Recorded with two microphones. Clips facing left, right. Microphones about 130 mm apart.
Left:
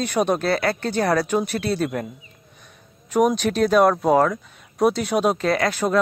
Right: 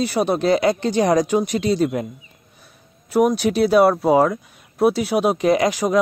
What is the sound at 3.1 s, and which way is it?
Speech, 10° right (ahead or behind).